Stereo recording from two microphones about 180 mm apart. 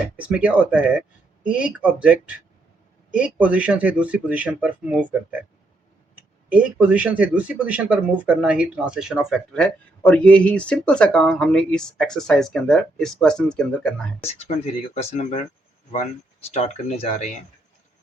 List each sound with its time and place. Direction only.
0.2 s speech: 5° right (ahead or behind)
6.5 s speech: 5° right (ahead or behind)
14.9 s speech: 35° left (ahead or behind)